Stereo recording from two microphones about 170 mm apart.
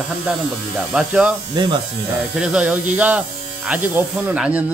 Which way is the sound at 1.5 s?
25° right (ahead or behind).